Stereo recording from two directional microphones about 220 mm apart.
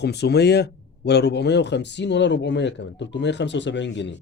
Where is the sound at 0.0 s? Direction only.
50° left (ahead or behind).